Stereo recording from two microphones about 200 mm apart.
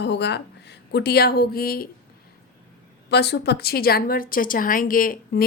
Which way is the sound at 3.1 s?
55° left (ahead or behind).